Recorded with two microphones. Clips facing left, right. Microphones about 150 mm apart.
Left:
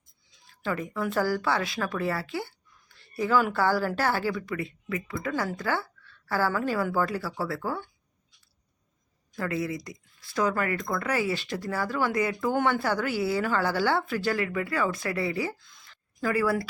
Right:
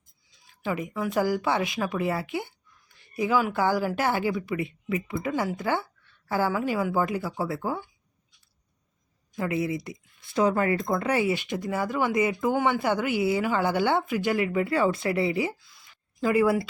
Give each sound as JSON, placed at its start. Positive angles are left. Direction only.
{"t": 0.6, "sound": "speech", "side_deg": -15}
{"t": 1.2, "sound": "speech", "side_deg": -15}
{"t": 2.9, "sound": "a sound", "side_deg": -15}
{"t": 3.5, "sound": "speech", "side_deg": -15}
{"t": 9.3, "sound": "speech", "side_deg": -20}
{"t": 15.6, "sound": "a sound", "side_deg": -5}
{"t": 16.2, "sound": "speech", "side_deg": -20}